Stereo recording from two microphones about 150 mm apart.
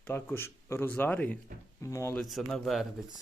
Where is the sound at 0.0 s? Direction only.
15° left (ahead or behind).